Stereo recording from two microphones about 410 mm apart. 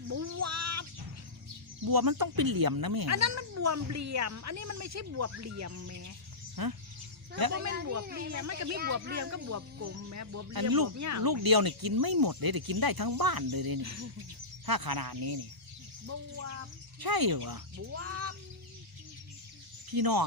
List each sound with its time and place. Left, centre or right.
0.1 s a sound: right
1.8 s speech: right
3.1 s a woman's voice: right
6.6 s speech: right
8.3 s a woman's voice: right
10.5 s speech: right
16.0 s a woman's voice: right
17.0 s speech: right
17.7 s a woman's voice: right
19.9 s speech: right